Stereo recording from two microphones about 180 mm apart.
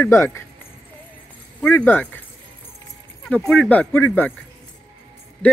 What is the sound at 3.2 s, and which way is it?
Speech, 5° left (ahead or behind).